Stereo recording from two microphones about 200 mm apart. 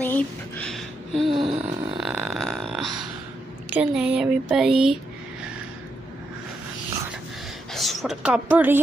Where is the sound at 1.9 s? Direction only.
5° right (ahead or behind).